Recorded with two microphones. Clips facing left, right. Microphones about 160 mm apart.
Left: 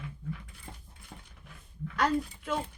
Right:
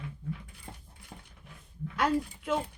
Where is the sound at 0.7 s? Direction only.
40° right (ahead or behind).